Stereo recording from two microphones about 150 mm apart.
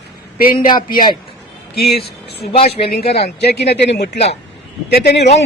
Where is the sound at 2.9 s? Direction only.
90° left.